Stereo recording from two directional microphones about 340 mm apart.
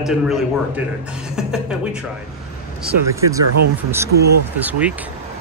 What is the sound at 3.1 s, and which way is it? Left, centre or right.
Speech, centre.